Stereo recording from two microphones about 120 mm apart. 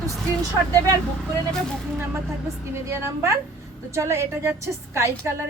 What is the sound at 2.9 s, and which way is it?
A woman's voice, 25° right (ahead or behind).